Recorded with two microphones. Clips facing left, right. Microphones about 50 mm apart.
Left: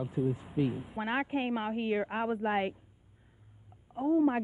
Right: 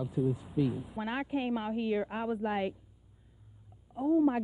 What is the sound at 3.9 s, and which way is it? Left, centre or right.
Speech, left.